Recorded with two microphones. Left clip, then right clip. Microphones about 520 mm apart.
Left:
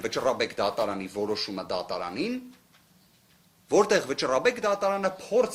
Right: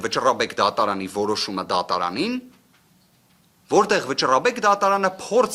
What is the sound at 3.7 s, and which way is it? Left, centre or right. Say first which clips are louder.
Speech: right 4 dB; right.